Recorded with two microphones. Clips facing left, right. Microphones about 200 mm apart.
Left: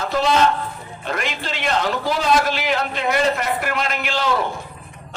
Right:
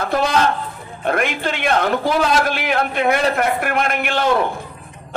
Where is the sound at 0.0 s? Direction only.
55° right (ahead or behind).